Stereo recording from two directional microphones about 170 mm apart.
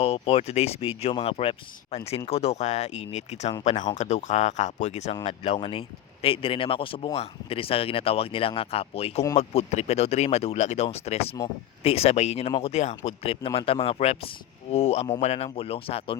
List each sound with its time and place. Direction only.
0.0 s speech: 35° left (ahead or behind)